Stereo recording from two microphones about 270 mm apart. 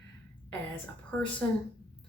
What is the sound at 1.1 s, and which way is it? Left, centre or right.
Speech, centre.